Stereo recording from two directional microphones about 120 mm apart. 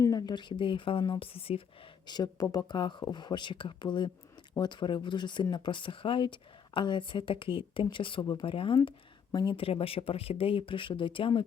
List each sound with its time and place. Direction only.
0.0 s speech: 30° left (ahead or behind); by 1.6 s 55° left (ahead or behind)
2.0 s speech: 35° left (ahead or behind)
8.4 s speech: 45° left (ahead or behind)